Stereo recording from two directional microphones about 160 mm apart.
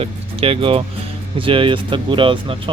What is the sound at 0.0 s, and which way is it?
Speech, 35° right (ahead or behind).